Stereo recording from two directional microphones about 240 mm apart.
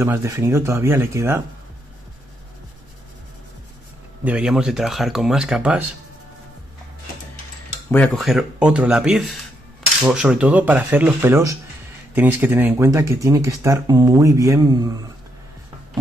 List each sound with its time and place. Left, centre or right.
0.0 s speech: centre
4.2 s speech: centre
7.9 s speech: centre